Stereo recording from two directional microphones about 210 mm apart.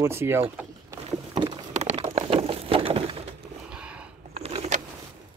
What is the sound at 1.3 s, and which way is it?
Vehicle, 25° right (ahead or behind).